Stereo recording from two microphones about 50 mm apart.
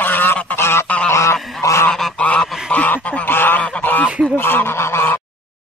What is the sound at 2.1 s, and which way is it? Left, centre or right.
Goose, left.